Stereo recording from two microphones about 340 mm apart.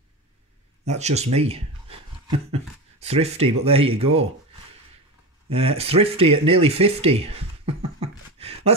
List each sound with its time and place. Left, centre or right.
0.8 s speech: centre
5.5 s speech: centre
8.4 s a sound: centre